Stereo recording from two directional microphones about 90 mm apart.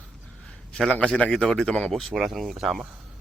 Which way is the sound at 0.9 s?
10° left (ahead or behind).